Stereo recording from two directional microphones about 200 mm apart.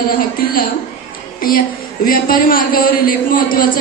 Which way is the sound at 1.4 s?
45° left (ahead or behind).